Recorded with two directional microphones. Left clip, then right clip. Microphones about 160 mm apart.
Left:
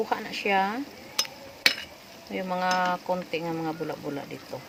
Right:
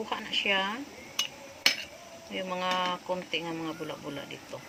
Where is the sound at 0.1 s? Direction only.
70° left (ahead or behind).